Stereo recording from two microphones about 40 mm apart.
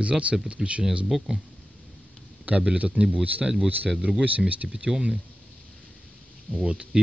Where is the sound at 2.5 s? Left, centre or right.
Right.